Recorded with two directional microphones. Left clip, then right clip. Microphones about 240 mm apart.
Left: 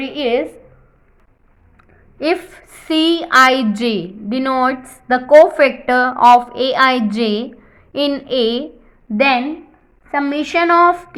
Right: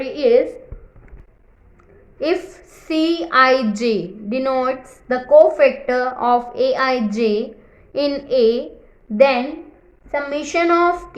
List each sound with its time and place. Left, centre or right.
0.0 s a woman's voice: left
2.1 s a woman's voice: centre